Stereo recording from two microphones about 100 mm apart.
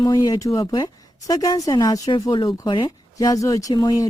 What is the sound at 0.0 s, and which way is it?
Speech, 40° left (ahead or behind).